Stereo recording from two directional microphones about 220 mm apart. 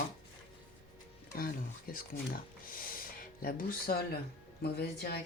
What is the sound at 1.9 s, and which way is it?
Speech, 40° left (ahead or behind).